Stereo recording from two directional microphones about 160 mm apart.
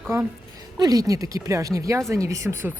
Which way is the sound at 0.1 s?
20° right (ahead or behind).